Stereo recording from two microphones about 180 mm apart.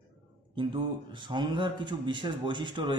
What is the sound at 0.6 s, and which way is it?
Speech, 25° right (ahead or behind).